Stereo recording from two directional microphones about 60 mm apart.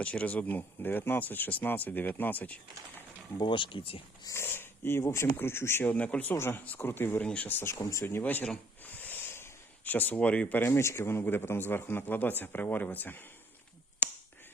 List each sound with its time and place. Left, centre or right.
0.0 s speech: left
4.4 s speech: left
5.8 s speech: left
6.3 s a man's voice: left
7.6 s speech: left
8.2 s a man's voice: left
8.8 s a sound: left
9.8 s speech: left
10.2 s speech: centre
10.7 s a man's voice: left